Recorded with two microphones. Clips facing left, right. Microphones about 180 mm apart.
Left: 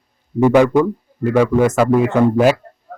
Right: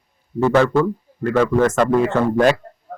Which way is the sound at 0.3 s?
15° left (ahead or behind).